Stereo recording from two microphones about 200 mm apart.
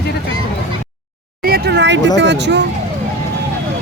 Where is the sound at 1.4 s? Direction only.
55° right (ahead or behind).